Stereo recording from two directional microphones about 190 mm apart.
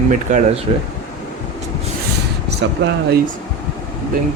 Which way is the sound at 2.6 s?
70° right (ahead or behind).